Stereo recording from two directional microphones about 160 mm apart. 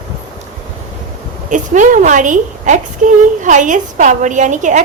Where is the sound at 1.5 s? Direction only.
50° right (ahead or behind).